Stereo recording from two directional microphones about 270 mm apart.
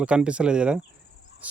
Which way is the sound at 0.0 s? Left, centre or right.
Centre.